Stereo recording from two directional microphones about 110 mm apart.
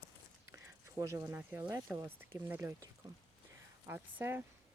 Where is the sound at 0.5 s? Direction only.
25° right (ahead or behind).